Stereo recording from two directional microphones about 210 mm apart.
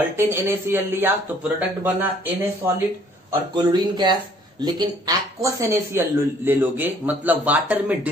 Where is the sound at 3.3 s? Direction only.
20° right (ahead or behind).